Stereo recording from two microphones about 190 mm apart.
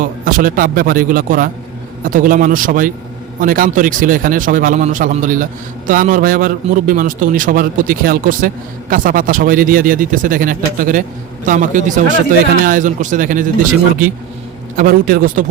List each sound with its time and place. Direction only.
0.0 s a man's voice: 45° right (ahead or behind)
14.8 s a man's voice: 45° right (ahead or behind)